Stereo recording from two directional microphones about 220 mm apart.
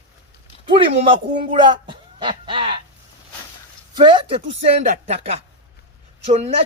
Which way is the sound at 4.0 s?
25° right (ahead or behind).